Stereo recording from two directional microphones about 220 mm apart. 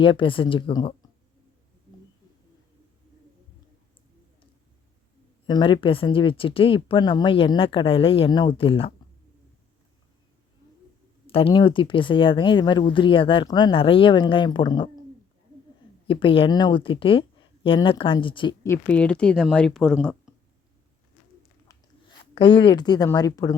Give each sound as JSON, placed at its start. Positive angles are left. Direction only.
{"t": 0.0, "sound": "a woman's voice", "side_deg": 25}
{"t": 5.5, "sound": "a woman's voice", "side_deg": 20}
{"t": 11.3, "sound": "a woman's voice", "side_deg": 25}
{"t": 16.0, "sound": "a woman's voice", "side_deg": 25}
{"t": 21.7, "sound": "biting", "side_deg": 15}
{"t": 22.4, "sound": "speech", "side_deg": 20}